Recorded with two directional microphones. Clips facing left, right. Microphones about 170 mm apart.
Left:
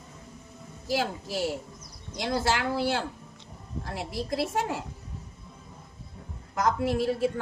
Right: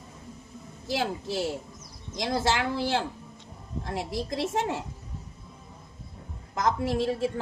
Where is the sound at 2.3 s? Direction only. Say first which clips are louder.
Right 1 dB; 25° right (ahead or behind).